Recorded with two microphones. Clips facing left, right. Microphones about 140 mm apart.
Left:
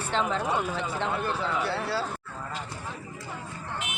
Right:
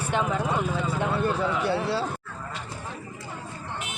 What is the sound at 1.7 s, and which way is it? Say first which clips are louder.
Speech: right 4 dB; 20° right (ahead or behind).